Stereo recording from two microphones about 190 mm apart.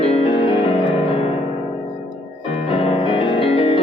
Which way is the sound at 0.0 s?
35° left (ahead or behind).